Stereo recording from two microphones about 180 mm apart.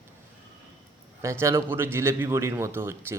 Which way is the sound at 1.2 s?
15° right (ahead or behind).